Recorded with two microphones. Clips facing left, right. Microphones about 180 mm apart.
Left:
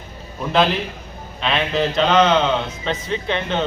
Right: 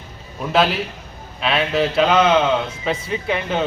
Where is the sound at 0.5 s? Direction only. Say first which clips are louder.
Even; 5° right (ahead or behind).